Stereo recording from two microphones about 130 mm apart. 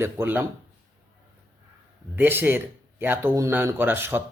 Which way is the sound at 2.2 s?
15° right (ahead or behind).